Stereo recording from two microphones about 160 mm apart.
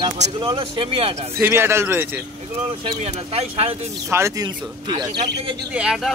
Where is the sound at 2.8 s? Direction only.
40° right (ahead or behind).